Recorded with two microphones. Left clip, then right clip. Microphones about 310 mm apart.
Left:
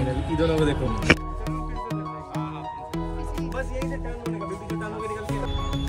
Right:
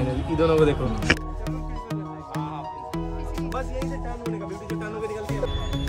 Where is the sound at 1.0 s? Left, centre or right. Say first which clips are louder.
Left 2 dB; centre.